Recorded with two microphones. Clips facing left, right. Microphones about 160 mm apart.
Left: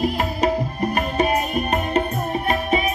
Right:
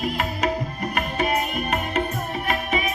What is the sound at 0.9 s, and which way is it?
Music, 30° left (ahead or behind).